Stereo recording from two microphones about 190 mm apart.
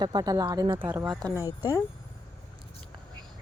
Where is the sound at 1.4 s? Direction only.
15° left (ahead or behind).